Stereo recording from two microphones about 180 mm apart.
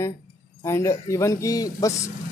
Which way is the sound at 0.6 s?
15° left (ahead or behind).